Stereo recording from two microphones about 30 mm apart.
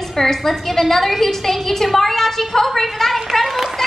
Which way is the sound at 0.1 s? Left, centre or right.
Centre.